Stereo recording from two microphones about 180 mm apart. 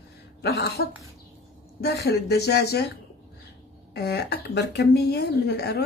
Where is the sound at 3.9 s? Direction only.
60° left (ahead or behind).